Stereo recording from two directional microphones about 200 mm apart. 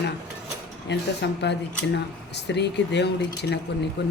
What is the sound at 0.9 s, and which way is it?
A woman's voice, 60° left (ahead or behind).